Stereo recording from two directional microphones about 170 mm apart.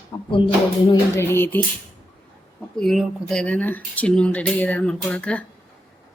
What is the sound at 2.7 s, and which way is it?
Speech, centre (ahead or behind).